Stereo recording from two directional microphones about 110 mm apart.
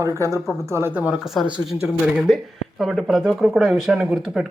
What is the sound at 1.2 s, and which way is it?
Speech, centre (ahead or behind).